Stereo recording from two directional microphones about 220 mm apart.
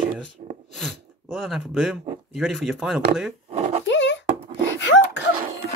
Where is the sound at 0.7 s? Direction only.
Centre (ahead or behind).